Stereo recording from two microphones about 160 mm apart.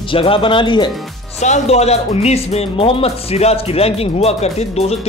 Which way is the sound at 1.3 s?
45° left (ahead or behind).